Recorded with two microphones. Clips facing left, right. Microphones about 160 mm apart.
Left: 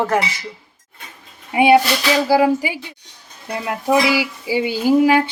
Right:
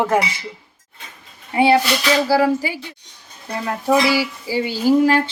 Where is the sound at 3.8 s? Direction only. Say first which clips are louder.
Even; 15° left (ahead or behind).